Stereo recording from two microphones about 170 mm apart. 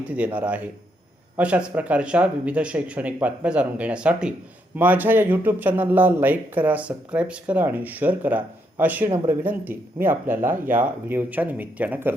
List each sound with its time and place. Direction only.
0.0 s speech: 5° right (ahead or behind)
9.0 s speech: 30° right (ahead or behind)
9.4 s speech: 10° right (ahead or behind)